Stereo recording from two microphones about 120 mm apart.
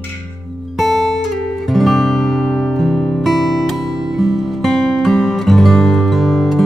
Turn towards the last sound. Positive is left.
turn(degrees=0)  # may be behind; listen again after turning